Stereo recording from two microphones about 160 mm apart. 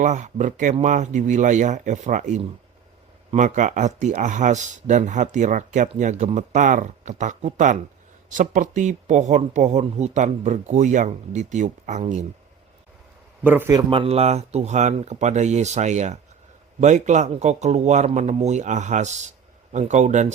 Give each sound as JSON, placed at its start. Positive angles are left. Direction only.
{"t": 0.0, "sound": "speech", "side_deg": -50}
{"t": 13.4, "sound": "a man's voice", "side_deg": -10}
{"t": 13.7, "sound": "speech", "side_deg": -35}